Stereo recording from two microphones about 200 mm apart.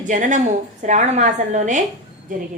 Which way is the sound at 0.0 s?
40° right (ahead or behind).